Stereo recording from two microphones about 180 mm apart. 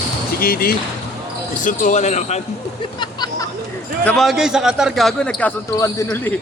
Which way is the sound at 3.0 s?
25° left (ahead or behind).